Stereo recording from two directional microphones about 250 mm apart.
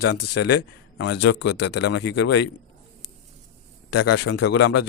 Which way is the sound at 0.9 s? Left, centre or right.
Left.